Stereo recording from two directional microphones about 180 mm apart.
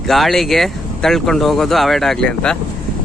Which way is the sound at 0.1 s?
Centre (ahead or behind).